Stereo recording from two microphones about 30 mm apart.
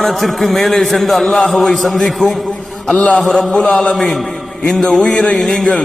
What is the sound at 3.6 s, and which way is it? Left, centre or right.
Speech, left.